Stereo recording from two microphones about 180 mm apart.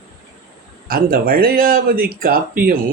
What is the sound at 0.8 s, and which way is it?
Speech, 55° right (ahead or behind).